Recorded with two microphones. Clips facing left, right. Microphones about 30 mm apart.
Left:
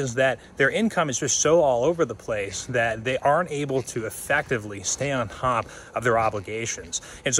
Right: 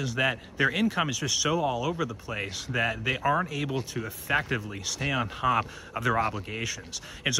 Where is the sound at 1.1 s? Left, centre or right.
Right.